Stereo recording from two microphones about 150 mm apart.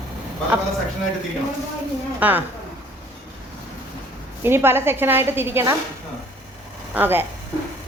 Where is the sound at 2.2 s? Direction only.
10° right (ahead or behind).